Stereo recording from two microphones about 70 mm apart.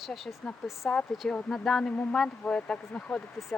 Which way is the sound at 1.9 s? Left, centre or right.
Left.